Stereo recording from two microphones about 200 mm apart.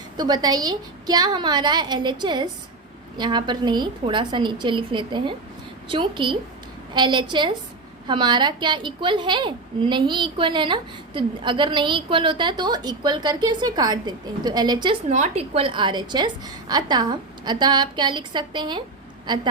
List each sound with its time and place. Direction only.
0.2 s a woman's voice: 20° right (ahead or behind)
15.1 s a woman's voice: 35° right (ahead or behind)